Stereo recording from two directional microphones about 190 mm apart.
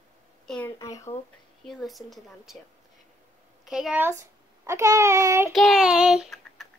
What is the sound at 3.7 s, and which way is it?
A child's voice, 5° right (ahead or behind).